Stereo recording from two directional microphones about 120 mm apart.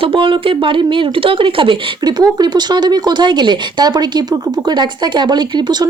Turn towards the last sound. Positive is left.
turn(degrees=-35)  # may be behind; listen again after turning